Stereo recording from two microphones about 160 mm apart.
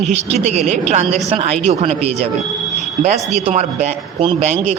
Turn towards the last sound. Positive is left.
turn(degrees=-40)  # may be behind; listen again after turning